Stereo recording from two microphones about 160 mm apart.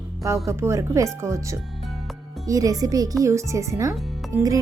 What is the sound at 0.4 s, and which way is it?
Speech, 20° right (ahead or behind).